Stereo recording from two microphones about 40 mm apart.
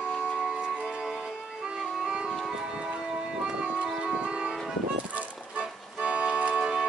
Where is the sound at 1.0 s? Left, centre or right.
Centre.